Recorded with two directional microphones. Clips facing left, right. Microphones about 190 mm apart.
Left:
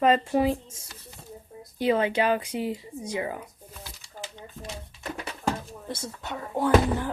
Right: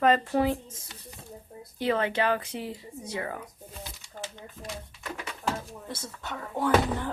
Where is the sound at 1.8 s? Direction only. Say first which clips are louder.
Left 3 dB; 15° left (ahead or behind).